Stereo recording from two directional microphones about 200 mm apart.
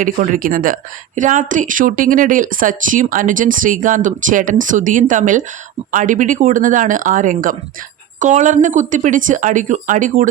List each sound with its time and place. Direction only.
0.0 s speech: 40° right (ahead or behind)